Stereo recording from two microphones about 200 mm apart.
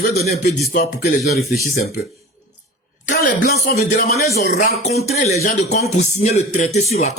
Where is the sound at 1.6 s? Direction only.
45° left (ahead or behind).